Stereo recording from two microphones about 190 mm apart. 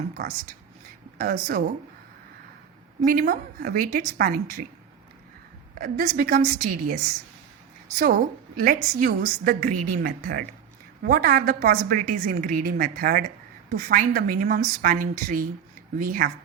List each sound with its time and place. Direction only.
0.2 s a woman's voice: 50° right (ahead or behind)
3.0 s a woman's voice: 50° right (ahead or behind)
5.8 s a woman's voice: 45° right (ahead or behind)